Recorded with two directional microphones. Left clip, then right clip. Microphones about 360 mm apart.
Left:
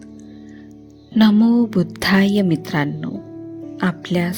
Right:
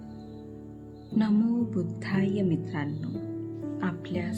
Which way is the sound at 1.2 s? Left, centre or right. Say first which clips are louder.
Left 13 dB; left.